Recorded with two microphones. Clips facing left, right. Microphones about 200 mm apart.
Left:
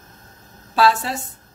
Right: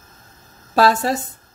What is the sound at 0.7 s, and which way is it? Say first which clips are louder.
Speech: right 2 dB; 40° right (ahead or behind).